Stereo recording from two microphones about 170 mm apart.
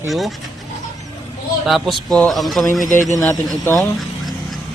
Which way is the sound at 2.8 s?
50° left (ahead or behind).